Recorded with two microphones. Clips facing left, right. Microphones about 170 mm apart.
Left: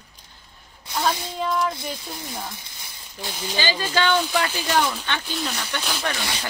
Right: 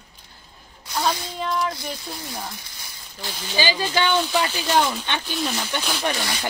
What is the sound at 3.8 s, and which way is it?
Speech, 10° right (ahead or behind).